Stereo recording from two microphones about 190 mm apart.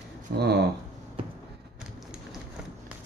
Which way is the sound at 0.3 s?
55° right (ahead or behind).